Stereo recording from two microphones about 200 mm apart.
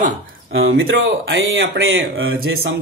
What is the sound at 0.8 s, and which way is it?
Speech, 70° right (ahead or behind).